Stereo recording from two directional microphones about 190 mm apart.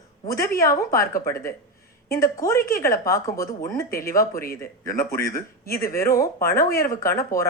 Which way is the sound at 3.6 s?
50° left (ahead or behind).